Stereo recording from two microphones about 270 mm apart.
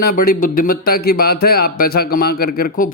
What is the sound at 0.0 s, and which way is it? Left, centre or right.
A man's voice, left.